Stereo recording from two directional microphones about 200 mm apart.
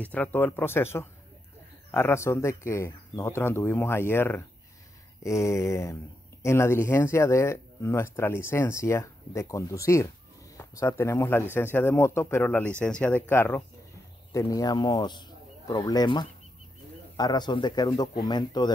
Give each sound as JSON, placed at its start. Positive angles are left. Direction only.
{"t": 0.0, "sound": "speech", "side_deg": 10}